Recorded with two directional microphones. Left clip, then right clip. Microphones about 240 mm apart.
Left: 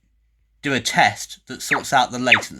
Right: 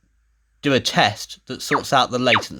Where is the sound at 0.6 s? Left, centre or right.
Right.